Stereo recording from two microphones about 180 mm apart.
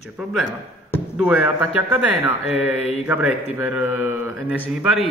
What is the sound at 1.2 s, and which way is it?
Speech, 5° right (ahead or behind).